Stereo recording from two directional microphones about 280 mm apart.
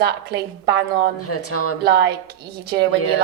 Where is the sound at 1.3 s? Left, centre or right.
Left.